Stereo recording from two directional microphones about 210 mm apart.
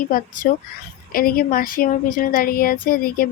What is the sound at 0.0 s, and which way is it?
A woman's voice, 40° left (ahead or behind).